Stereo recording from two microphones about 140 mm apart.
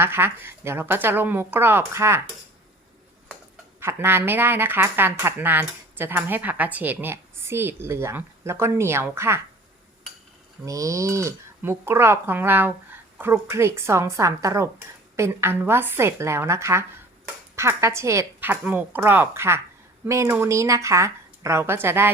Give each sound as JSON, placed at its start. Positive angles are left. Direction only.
{"t": 0.0, "sound": "speech", "side_deg": -15}
{"t": 3.8, "sound": "speech", "side_deg": -15}
{"t": 10.7, "sound": "speech", "side_deg": -25}